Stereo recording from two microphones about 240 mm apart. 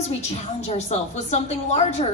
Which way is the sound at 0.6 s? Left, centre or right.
Left.